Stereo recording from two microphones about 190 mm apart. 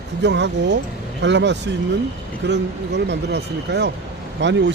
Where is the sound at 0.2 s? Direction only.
65° right (ahead or behind).